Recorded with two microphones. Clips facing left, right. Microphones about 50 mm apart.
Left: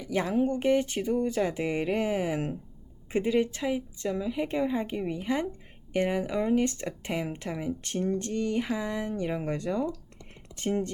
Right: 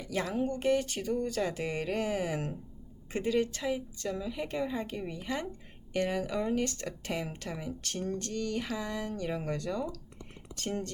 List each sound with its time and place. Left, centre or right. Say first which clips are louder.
0.0 s speech: left 5 dB; left